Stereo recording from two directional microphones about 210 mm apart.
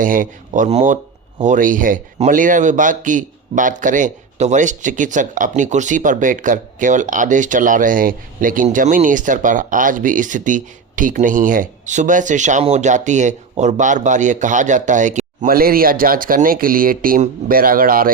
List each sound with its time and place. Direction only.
0.0 s speech: 40° right (ahead or behind)